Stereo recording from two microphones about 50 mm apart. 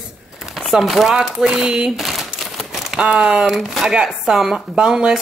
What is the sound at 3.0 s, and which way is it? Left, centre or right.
A woman's voice, centre.